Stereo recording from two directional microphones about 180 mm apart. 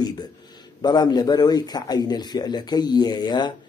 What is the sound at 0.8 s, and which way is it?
Speech, 20° left (ahead or behind).